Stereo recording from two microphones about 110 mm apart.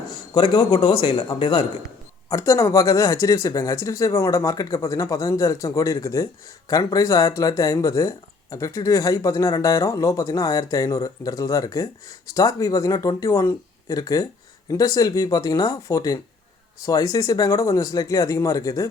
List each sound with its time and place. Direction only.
0.1 s a man's voice: 40° left (ahead or behind)
2.3 s speech: 30° left (ahead or behind)